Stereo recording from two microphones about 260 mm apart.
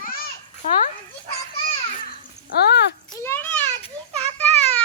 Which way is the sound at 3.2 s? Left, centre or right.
Centre.